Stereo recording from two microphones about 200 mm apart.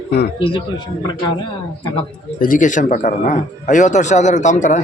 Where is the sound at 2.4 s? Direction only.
40° left (ahead or behind).